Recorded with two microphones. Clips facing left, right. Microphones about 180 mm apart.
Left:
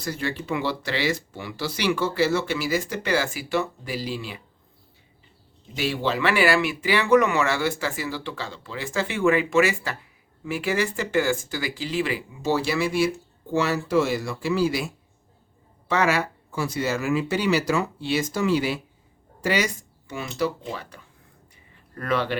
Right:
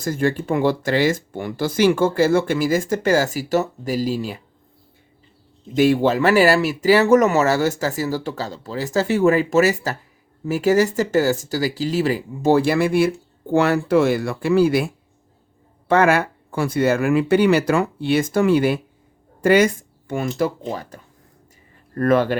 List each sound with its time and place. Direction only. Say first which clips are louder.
0.0 s speech: right 8 dB; 45° right (ahead or behind)
5.7 s speech: right 10 dB; 50° right (ahead or behind)